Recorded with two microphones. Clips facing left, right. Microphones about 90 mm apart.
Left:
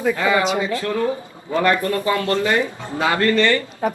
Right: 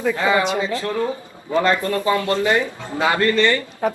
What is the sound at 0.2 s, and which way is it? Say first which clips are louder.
A man's voice: even; 25° right (ahead or behind).